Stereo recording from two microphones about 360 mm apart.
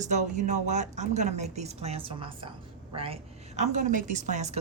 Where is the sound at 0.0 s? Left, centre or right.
Centre.